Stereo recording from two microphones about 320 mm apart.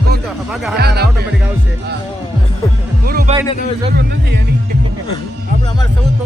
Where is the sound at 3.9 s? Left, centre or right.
Right.